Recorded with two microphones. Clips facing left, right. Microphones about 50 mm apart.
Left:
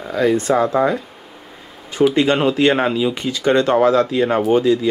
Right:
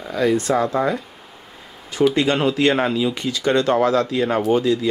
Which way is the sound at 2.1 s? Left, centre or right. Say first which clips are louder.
Left 3 dB; left.